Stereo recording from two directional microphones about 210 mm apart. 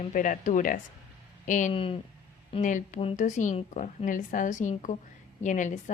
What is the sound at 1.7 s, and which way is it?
Speech, 25° left (ahead or behind).